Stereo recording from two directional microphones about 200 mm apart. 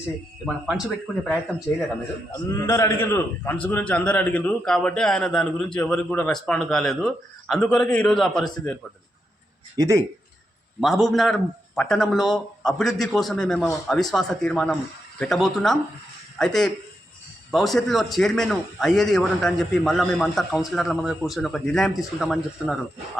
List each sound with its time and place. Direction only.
0.4 s a man's voice: 5° right (ahead or behind)
2.5 s a man's voice: 15° left (ahead or behind)
9.7 s speech: 15° right (ahead or behind)
10.8 s a man's voice: centre (ahead or behind)